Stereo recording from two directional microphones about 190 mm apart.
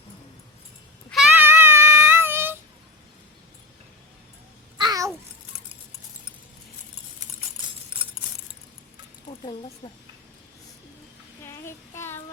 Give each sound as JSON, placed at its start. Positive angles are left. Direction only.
{"t": 1.1, "sound": "child singing", "side_deg": -5}
{"t": 4.8, "sound": "babbling", "side_deg": -20}
{"t": 9.5, "sound": "speech", "side_deg": 25}
{"t": 11.4, "sound": "child singing", "side_deg": 15}